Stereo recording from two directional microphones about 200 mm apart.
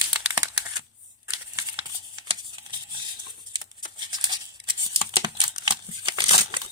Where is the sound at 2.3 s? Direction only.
25° right (ahead or behind).